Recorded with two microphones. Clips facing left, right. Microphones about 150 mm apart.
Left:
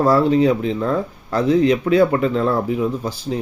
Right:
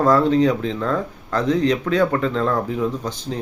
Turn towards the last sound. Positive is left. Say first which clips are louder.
# left 3 dB
turn(degrees=10)  # may be behind; listen again after turning